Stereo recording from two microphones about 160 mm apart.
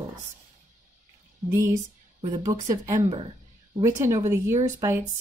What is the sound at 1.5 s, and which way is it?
A woman's voice, 20° right (ahead or behind).